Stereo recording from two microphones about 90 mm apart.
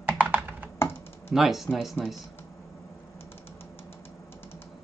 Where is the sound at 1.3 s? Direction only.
5° right (ahead or behind).